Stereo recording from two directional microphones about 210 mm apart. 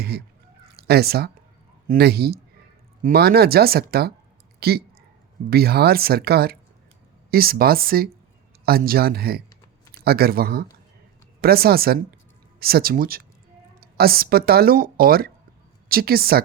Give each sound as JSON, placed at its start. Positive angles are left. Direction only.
{"t": 0.7, "sound": "speech", "side_deg": -50}